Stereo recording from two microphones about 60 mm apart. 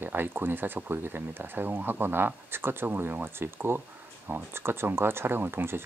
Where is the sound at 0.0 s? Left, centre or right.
Right.